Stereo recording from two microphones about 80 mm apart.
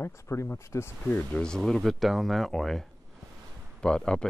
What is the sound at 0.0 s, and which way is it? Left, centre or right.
Speech, left.